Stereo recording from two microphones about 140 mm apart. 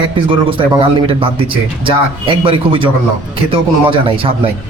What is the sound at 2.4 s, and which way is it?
A man's voice, 40° right (ahead or behind).